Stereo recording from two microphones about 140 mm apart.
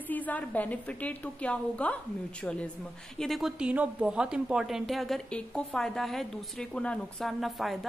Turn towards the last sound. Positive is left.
turn(degrees=0)  # may be behind; listen again after turning